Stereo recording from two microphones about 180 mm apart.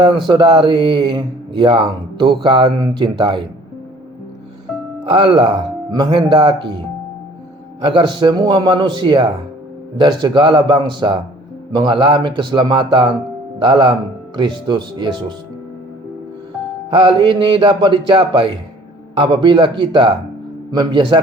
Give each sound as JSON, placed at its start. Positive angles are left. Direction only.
{"t": 0.3, "sound": "speech", "side_deg": -25}
{"t": 5.0, "sound": "speech", "side_deg": -30}
{"t": 7.8, "sound": "speech", "side_deg": -25}
{"t": 16.9, "sound": "speech", "side_deg": -25}